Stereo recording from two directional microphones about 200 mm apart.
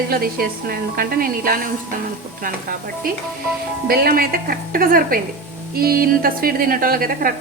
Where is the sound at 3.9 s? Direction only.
50° right (ahead or behind).